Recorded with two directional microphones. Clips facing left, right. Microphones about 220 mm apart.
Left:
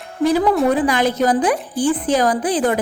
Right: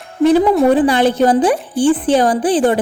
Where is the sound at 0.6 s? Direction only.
30° right (ahead or behind).